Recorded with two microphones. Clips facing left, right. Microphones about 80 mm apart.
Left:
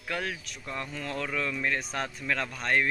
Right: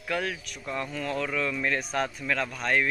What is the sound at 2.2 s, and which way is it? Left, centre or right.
Speech, centre.